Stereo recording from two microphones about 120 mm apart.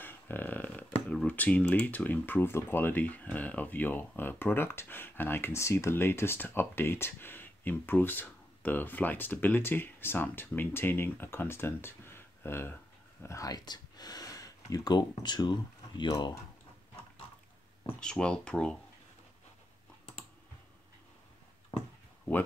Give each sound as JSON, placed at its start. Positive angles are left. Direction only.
{"t": 0.0, "sound": "a sound", "side_deg": 15}
{"t": 1.1, "sound": "speech", "side_deg": 10}
{"t": 18.0, "sound": "speech", "side_deg": 5}